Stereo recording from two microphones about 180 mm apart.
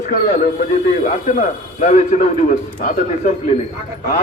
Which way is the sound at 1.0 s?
45° left (ahead or behind).